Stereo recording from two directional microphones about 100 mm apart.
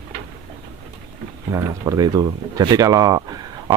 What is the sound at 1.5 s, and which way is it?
Speech, 35° right (ahead or behind).